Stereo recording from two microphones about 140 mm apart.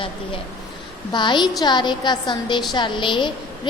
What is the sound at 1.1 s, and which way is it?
A woman's voice, 30° left (ahead or behind).